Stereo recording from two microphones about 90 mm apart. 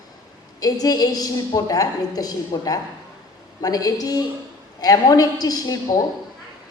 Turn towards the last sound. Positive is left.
turn(degrees=45)  # may be behind; listen again after turning